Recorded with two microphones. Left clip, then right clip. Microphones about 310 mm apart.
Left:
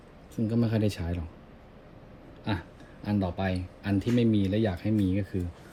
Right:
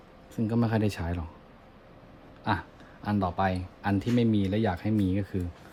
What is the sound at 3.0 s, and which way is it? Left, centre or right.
Speech, centre.